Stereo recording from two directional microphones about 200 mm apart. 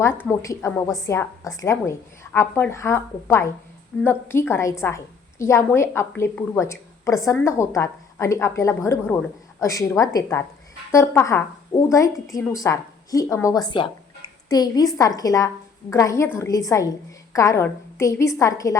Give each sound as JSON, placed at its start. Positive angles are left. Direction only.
{"t": 0.0, "sound": "a woman's voice", "side_deg": 10}